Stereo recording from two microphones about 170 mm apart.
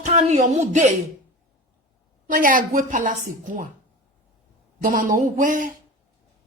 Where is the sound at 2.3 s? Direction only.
55° right (ahead or behind).